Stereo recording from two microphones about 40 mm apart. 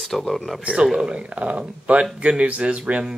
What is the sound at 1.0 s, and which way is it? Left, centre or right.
Speech, right.